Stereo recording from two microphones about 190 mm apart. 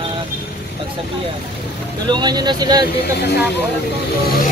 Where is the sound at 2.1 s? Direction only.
20° right (ahead or behind).